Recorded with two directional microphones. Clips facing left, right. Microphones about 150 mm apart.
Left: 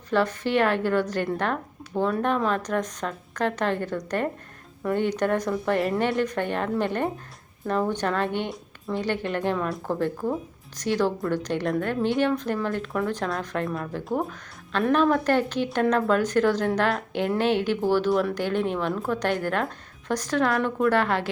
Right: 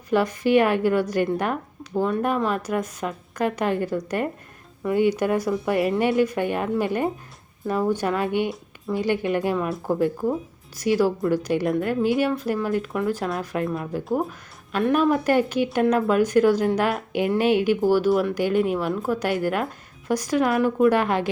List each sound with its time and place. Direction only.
0.1 s speech: 10° right (ahead or behind)